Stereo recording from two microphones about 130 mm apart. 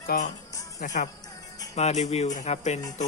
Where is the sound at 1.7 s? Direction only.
60° left (ahead or behind).